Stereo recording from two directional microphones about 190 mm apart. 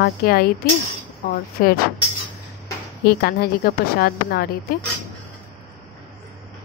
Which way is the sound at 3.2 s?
55° left (ahead or behind).